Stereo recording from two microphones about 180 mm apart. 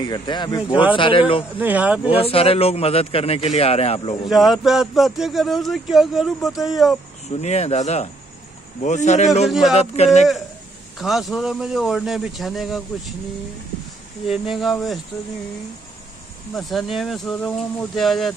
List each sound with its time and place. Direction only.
0.0 s speech: 25° left (ahead or behind)
1.6 s speech: 10° right (ahead or behind)
2.0 s a man's voice: 30° left (ahead or behind)
4.3 s speech: centre (ahead or behind)
7.2 s a man's voice: 40° left (ahead or behind)
9.5 s speech: centre (ahead or behind)
9.8 s a man's voice: 35° left (ahead or behind)
11.0 s speech: centre (ahead or behind)
14.2 s speech: centre (ahead or behind)
16.5 s speech: centre (ahead or behind)